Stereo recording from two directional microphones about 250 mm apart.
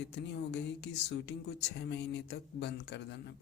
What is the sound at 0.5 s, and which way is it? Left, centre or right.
Speech, left.